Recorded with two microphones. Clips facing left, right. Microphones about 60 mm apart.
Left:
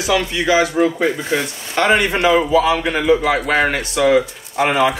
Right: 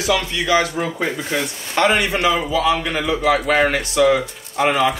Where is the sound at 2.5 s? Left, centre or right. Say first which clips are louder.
Left 3 dB; centre.